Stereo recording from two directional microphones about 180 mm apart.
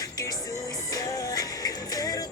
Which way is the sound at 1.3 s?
20° left (ahead or behind).